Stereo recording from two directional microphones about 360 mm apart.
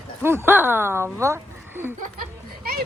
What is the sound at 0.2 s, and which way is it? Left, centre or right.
Speech, centre.